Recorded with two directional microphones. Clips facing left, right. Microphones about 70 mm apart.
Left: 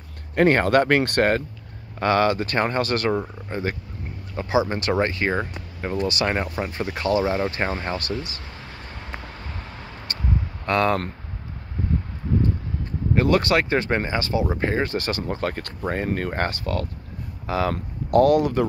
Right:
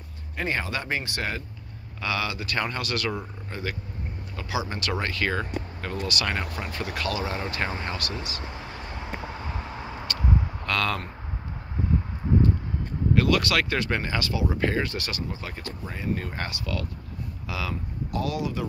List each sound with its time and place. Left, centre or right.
0.4 s speech: left
8.4 s vehicle: centre
10.6 s speech: left
12.3 s a sound: centre
13.1 s speech: left
15.2 s speech: left
17.7 s speech: left